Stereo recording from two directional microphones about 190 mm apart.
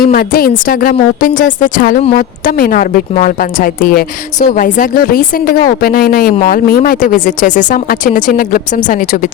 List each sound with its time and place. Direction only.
0.0 s a woman's voice: 50° left (ahead or behind)